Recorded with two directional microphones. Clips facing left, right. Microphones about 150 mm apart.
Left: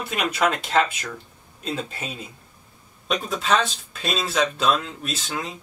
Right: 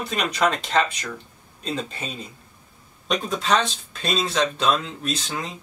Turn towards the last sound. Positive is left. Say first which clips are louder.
# right 1 dB
turn(degrees=5)  # may be behind; listen again after turning